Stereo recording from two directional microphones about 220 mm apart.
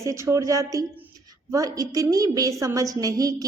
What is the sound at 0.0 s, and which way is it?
A woman's voice, 15° right (ahead or behind).